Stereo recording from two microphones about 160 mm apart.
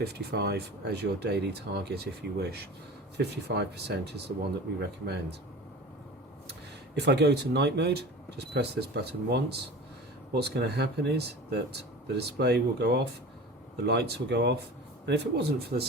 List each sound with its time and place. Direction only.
0.0 s speech: 85° right
7.0 s speech: 90° right